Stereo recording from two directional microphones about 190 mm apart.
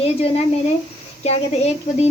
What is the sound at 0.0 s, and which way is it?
Speech, 30° left (ahead or behind).